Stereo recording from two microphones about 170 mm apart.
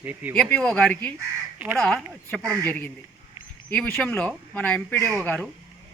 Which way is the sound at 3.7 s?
10° left (ahead or behind).